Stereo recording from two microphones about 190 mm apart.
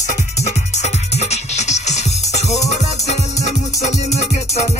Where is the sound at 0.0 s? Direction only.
35° left (ahead or behind).